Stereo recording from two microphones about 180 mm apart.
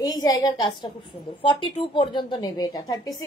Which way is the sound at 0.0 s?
20° left (ahead or behind).